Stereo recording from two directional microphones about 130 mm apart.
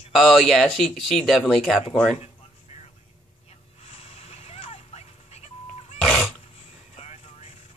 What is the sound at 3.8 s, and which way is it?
Music, 50° left (ahead or behind).